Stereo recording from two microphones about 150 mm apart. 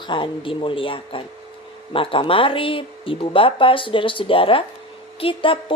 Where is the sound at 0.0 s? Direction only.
35° left (ahead or behind).